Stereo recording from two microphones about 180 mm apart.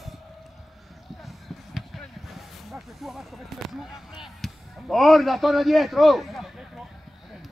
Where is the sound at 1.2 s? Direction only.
Centre (ahead or behind).